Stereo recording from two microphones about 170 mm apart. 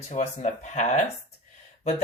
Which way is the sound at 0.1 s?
45° left (ahead or behind).